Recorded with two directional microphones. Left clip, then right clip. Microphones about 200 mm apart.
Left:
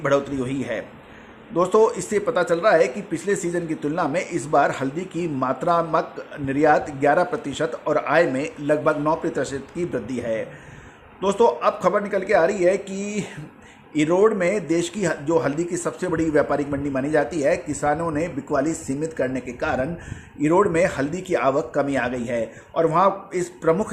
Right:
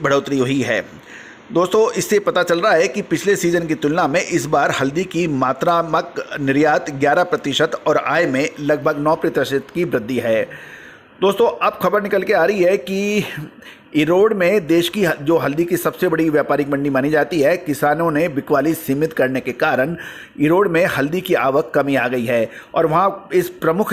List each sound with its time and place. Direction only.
0.0 s speech: 30° right (ahead or behind)